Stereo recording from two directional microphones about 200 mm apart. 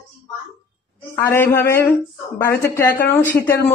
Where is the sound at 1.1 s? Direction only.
10° left (ahead or behind).